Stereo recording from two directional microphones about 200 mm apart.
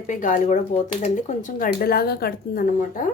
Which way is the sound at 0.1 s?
40° left (ahead or behind).